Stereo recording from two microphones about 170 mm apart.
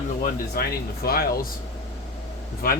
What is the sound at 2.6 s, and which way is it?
Speech, 60° left (ahead or behind).